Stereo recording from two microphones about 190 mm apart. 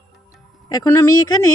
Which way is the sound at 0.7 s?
15° left (ahead or behind).